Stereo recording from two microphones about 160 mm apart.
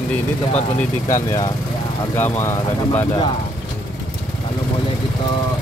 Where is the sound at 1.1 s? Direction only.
20° left (ahead or behind).